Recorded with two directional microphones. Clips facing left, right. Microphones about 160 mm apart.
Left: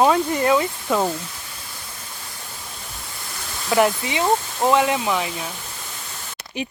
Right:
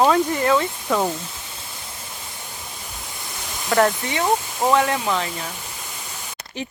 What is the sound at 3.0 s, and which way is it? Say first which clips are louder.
Waterfall: right 1 dB; 20° right (ahead or behind).